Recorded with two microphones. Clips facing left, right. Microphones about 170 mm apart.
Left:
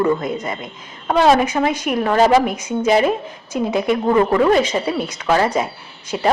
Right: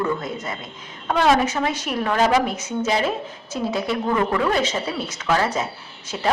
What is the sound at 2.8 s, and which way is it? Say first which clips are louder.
Speech: left 7 dB; 55° left (ahead or behind).